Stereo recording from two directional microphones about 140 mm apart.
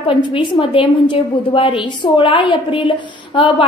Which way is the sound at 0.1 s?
35° left (ahead or behind).